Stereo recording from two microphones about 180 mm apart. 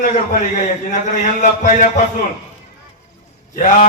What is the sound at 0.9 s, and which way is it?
Speech, 45° left (ahead or behind).